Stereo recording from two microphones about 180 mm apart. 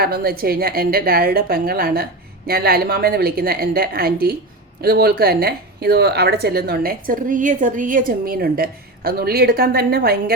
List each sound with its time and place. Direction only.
0.0 s speech: 55° right (ahead or behind)